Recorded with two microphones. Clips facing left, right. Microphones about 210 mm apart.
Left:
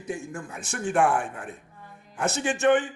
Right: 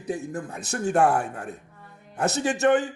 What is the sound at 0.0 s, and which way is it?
A man's voice, 35° right (ahead or behind).